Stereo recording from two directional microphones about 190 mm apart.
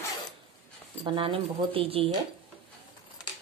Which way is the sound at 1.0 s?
25° right (ahead or behind).